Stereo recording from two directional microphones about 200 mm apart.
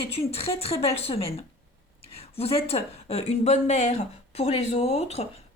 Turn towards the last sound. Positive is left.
turn(degrees=35)  # may be behind; listen again after turning